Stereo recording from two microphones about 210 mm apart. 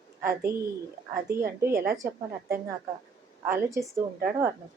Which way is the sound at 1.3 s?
10° right (ahead or behind).